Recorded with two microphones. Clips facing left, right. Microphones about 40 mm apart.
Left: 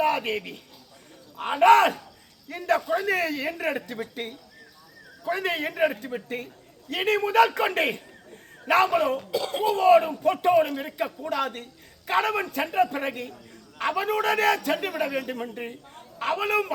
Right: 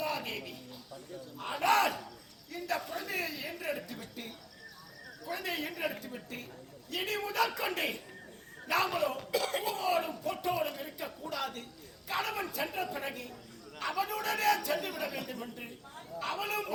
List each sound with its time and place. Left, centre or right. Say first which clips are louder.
0.0 s a man's voice: left 11 dB; left
2.8 s a man's voice: left 12 dB; left